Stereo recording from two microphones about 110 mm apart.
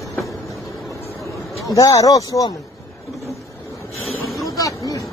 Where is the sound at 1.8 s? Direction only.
30° left (ahead or behind).